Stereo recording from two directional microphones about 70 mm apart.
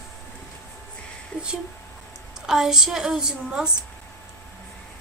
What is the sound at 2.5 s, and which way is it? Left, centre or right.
A woman's voice, centre.